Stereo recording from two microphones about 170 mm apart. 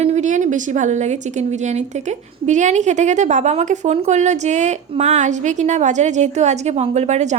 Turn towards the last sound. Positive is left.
turn(degrees=-40)  # may be behind; listen again after turning